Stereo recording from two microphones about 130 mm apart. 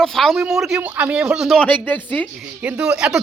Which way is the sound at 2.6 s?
10° right (ahead or behind).